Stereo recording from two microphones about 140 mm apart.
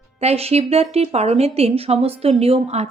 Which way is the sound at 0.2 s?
45° right (ahead or behind).